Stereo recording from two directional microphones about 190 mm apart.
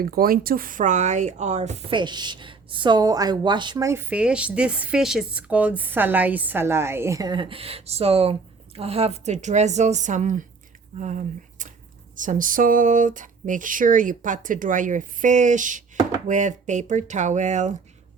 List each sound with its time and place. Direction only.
0.0 s speech: 50° right (ahead or behind)
12.1 s speech: 45° right (ahead or behind)